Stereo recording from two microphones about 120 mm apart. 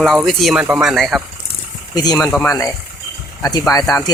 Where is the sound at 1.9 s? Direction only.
35° left (ahead or behind).